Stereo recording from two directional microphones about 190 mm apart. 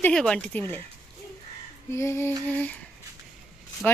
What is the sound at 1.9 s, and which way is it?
Speech, 15° left (ahead or behind).